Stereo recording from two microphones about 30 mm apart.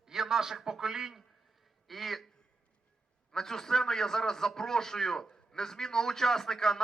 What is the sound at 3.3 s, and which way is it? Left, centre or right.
A man's voice, centre.